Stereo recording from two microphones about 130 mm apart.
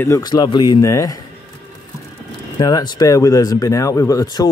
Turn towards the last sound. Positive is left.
turn(degrees=25)  # may be behind; listen again after turning